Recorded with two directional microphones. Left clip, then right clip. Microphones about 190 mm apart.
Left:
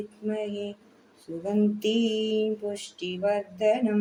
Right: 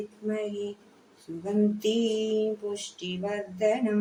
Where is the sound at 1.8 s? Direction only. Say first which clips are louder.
Even; centre (ahead or behind).